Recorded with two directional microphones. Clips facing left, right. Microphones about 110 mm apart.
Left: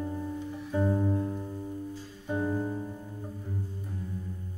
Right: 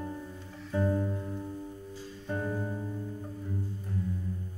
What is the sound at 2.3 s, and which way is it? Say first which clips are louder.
Music: left 4 dB; 15° left (ahead or behind).